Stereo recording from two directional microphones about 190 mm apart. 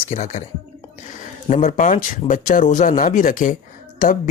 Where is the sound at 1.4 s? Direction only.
45° left (ahead or behind).